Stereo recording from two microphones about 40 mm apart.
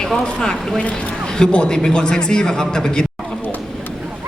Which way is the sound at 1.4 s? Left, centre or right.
Left.